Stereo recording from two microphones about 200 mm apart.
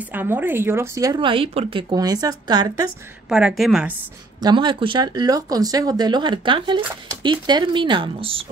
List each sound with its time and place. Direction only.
0.1 s speech: 10° right (ahead or behind)
3.3 s a woman's voice: 5° right (ahead or behind)
4.4 s speech: 20° right (ahead or behind)